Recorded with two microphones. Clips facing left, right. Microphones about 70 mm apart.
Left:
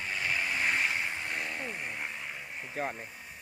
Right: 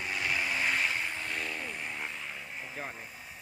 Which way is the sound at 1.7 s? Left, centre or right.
Centre.